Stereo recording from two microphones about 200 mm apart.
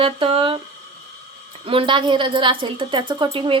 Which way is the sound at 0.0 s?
25° right (ahead or behind).